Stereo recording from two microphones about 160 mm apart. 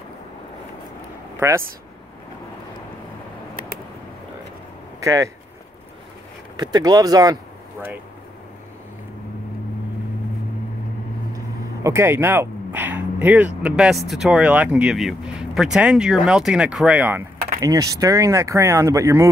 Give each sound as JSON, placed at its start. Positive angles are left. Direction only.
{"t": 5.0, "sound": "speech", "side_deg": -20}
{"t": 6.5, "sound": "speech", "side_deg": -25}
{"t": 11.3, "sound": "vehicle", "side_deg": -15}
{"t": 13.6, "sound": "speech", "side_deg": -5}